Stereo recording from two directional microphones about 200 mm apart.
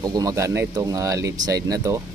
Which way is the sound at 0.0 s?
20° right (ahead or behind).